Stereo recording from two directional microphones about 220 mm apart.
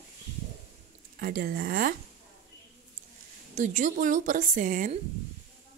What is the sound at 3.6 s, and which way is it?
A woman's voice, 35° right (ahead or behind).